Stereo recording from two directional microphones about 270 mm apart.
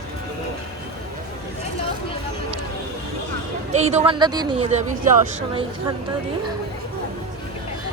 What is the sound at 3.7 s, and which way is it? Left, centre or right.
Speech, right.